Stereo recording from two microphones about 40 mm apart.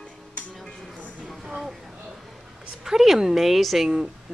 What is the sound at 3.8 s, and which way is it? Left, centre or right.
Speech, centre.